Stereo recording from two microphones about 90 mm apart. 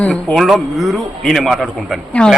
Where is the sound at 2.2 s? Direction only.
10° left (ahead or behind).